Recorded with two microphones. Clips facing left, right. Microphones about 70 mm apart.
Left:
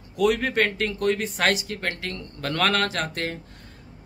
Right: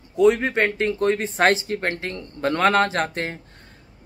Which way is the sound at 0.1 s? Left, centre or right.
Right.